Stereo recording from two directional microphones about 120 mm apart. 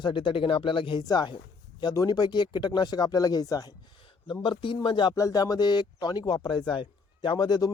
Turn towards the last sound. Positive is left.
turn(degrees=35)  # may be behind; listen again after turning